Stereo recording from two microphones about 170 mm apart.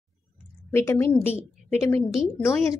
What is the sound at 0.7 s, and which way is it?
A woman's voice, 15° left (ahead or behind).